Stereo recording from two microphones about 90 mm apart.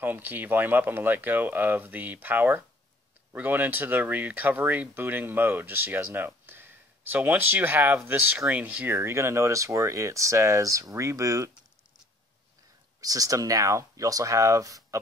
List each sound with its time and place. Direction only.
0.0 s speech: 20° right (ahead or behind)
8.9 s speech: 30° right (ahead or behind)
13.0 s speech: 40° right (ahead or behind)